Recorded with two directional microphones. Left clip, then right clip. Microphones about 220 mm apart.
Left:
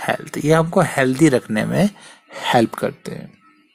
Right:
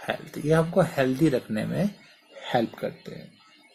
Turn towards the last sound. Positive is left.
turn(degrees=50)  # may be behind; listen again after turning